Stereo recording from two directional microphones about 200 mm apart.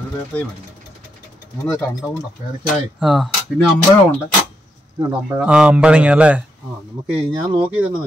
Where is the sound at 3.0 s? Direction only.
Centre (ahead or behind).